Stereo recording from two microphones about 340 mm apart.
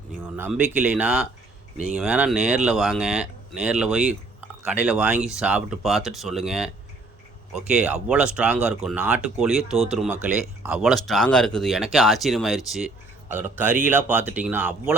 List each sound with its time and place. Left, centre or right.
0.3 s speech: centre